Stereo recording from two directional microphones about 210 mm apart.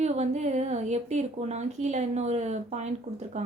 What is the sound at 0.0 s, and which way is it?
Speech, 30° right (ahead or behind).